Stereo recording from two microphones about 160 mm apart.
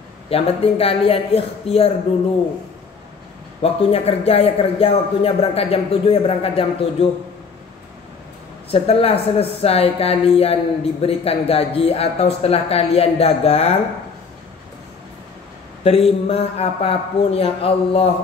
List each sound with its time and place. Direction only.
0.3 s speech: 35° left (ahead or behind)
3.6 s speech: 40° left (ahead or behind)
8.6 s speech: 35° left (ahead or behind)
15.8 s speech: 40° left (ahead or behind)